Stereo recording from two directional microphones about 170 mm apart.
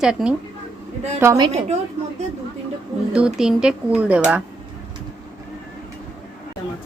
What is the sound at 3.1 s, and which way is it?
Speech, 5° right (ahead or behind).